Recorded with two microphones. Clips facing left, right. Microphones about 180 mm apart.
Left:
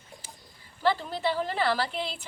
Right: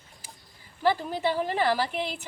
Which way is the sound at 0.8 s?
10° right (ahead or behind).